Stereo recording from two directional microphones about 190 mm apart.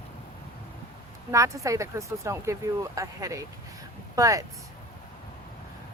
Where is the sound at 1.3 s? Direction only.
15° right (ahead or behind).